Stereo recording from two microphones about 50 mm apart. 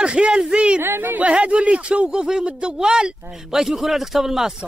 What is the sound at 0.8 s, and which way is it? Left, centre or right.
Speech, right.